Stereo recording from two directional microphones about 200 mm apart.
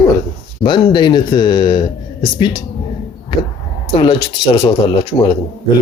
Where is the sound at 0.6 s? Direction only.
25° left (ahead or behind).